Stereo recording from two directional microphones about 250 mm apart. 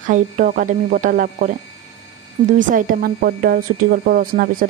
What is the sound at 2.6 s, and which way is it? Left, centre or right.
Speech, right.